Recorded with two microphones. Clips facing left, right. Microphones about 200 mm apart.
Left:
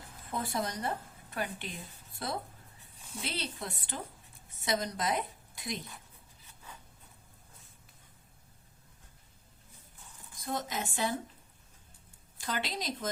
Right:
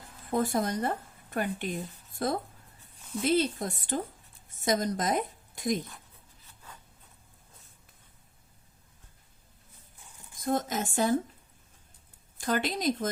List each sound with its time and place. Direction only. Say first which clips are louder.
0.3 s a woman's voice: right 7 dB; 45° right (ahead or behind)
10.4 s speech: right 7 dB; 50° right (ahead or behind)
12.4 s speech: right 7 dB; 50° right (ahead or behind)